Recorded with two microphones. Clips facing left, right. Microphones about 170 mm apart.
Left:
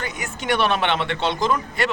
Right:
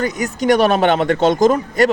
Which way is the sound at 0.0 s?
40° right (ahead or behind).